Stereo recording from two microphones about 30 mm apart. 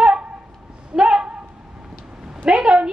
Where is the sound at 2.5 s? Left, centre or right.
Right.